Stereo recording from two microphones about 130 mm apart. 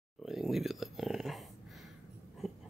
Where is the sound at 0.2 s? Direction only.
Centre (ahead or behind).